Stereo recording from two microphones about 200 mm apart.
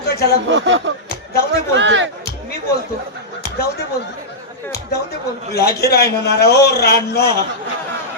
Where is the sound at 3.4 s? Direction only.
50° left (ahead or behind).